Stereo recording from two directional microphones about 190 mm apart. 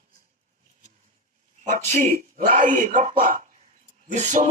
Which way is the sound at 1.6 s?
40° right (ahead or behind).